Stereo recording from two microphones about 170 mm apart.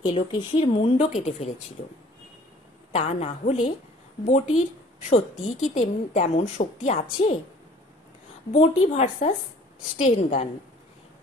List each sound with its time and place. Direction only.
0.0 s speech: 30° left (ahead or behind)
2.9 s speech: 40° left (ahead or behind)
5.1 s a woman's voice: 40° left (ahead or behind)
8.5 s speech: 35° left (ahead or behind)